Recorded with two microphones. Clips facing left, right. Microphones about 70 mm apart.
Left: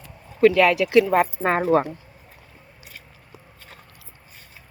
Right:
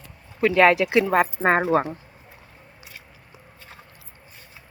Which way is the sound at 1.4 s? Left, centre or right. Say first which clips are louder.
Even; right.